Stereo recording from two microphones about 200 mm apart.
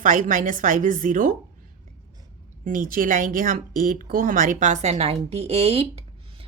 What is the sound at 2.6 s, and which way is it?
Speech, 45° right (ahead or behind).